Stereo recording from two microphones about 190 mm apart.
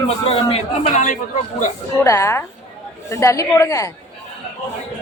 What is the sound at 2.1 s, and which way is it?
A woman's voice, 15° left (ahead or behind).